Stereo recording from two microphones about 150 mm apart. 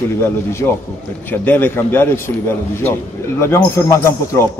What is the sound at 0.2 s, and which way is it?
A man's voice, 15° left (ahead or behind).